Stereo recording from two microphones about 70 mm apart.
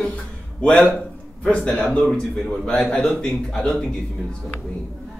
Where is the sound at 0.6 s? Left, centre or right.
Centre.